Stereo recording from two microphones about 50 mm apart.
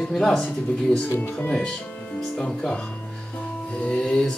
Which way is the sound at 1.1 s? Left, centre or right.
Left.